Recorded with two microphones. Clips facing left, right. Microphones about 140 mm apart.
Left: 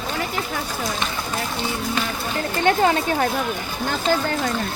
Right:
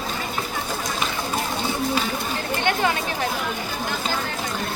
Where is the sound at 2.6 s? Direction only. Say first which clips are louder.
Left 5 dB; 35° left (ahead or behind).